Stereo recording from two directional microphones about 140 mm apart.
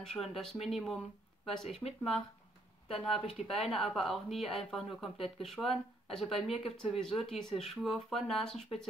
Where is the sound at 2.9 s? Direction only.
5° left (ahead or behind).